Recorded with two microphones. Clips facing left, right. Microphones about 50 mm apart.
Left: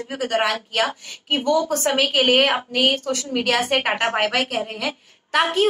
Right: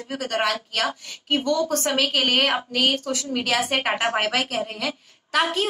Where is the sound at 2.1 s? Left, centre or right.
Centre.